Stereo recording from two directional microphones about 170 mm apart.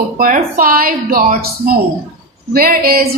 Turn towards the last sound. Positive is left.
turn(degrees=-60)  # may be behind; listen again after turning